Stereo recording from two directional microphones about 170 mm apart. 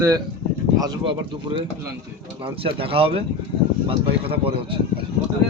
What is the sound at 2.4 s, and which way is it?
Speech, 30° right (ahead or behind).